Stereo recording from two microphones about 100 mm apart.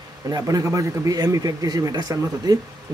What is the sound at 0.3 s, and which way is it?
A man's voice, 35° right (ahead or behind).